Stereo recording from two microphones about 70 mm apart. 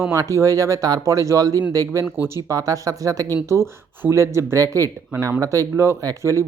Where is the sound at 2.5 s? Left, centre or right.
Right.